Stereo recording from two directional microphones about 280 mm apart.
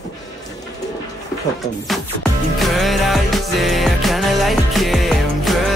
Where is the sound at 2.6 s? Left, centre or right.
Centre.